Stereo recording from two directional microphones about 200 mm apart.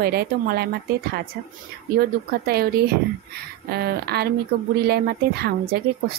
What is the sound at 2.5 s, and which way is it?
A woman's voice, 50° right (ahead or behind).